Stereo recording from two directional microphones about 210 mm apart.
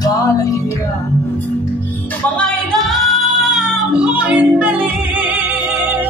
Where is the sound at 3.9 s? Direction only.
5° right (ahead or behind).